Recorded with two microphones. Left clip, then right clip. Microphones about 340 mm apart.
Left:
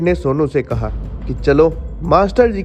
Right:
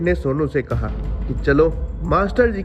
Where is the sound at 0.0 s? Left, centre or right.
Centre.